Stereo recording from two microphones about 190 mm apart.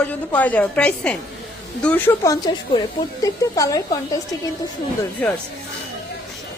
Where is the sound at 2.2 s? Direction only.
20° left (ahead or behind).